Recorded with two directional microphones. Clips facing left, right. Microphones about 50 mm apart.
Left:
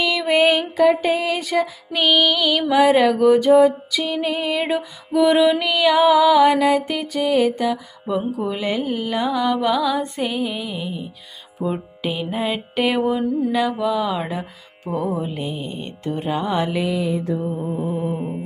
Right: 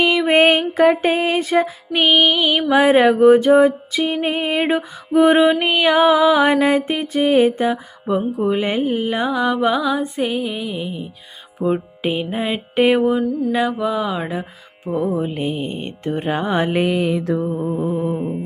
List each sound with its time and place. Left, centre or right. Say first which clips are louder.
0.0 s music: right 3 dB; right
4.0 s mantra: right 3 dB; right
10.0 s music: right 2 dB; centre
11.6 s music: right 4 dB; right
15.2 s mantra: right 4 dB; right
17.7 s a sound: right 3 dB; centre